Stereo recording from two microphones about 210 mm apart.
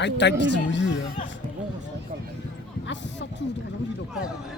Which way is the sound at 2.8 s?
55° left (ahead or behind).